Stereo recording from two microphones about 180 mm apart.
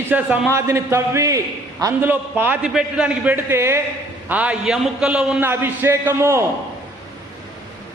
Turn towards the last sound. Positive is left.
turn(degrees=-15)  # may be behind; listen again after turning